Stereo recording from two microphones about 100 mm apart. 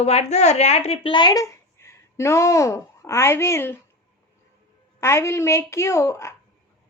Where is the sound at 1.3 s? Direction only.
35° left (ahead or behind).